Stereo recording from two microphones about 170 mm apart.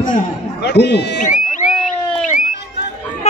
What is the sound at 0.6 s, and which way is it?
Speech, 75° left (ahead or behind).